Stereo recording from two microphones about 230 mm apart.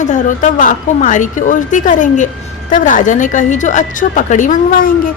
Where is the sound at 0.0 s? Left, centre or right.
Left.